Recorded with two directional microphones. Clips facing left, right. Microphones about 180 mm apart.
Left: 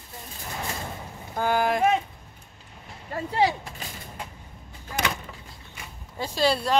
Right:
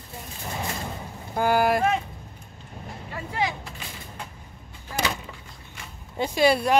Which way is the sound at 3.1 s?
35° left (ahead or behind).